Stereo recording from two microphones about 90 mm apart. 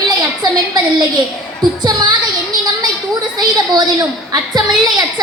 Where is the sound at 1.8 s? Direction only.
50° right (ahead or behind).